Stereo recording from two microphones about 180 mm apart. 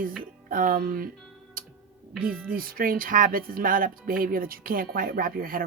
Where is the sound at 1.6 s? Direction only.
50° right (ahead or behind).